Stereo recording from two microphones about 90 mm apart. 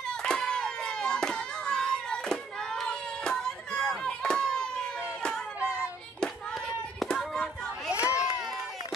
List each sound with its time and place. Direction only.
0.2 s a sound: 10° left (ahead or behind)
5.6 s child singing: 25° right (ahead or behind)
7.0 s hands: 5° left (ahead or behind)
7.9 s crowd: 30° left (ahead or behind)